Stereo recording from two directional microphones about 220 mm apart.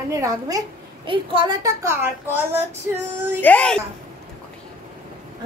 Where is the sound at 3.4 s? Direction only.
5° left (ahead or behind).